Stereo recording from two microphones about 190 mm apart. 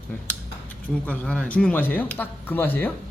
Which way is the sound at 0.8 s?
5° left (ahead or behind).